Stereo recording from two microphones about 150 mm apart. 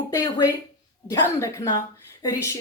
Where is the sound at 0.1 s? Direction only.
20° left (ahead or behind).